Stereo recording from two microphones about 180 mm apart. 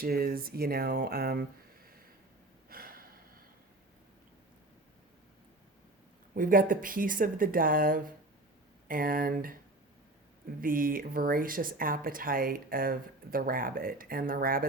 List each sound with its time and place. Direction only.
0.0 s speech: 55° right (ahead or behind)
2.6 s gasp: 55° right (ahead or behind)
6.3 s speech: 50° right (ahead or behind)
10.6 s speech: 50° right (ahead or behind)